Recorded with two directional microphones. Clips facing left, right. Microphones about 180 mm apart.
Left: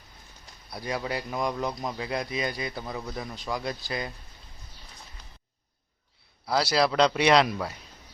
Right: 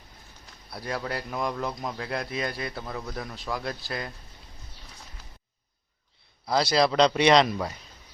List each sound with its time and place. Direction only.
0.7 s speech: centre (ahead or behind)
6.5 s speech: 5° left (ahead or behind)